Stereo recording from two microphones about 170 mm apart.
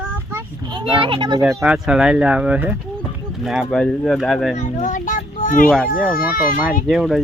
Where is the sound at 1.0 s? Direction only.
30° right (ahead or behind).